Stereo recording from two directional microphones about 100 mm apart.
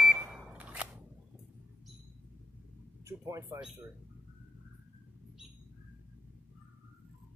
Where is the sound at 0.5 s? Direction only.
15° right (ahead or behind).